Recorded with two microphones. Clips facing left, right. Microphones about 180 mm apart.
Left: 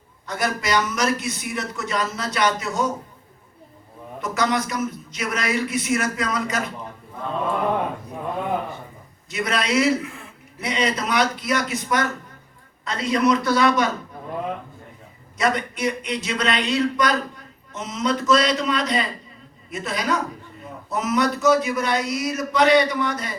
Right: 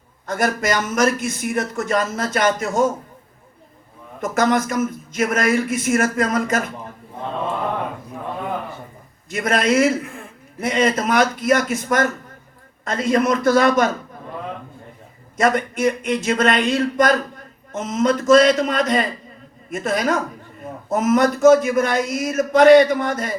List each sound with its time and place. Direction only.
0.3 s speech: 50° right (ahead or behind)
4.2 s speech: 50° right (ahead or behind)
9.3 s speech: 50° right (ahead or behind)
15.4 s speech: 50° right (ahead or behind)